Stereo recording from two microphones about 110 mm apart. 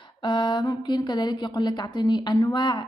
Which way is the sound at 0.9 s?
40° left (ahead or behind).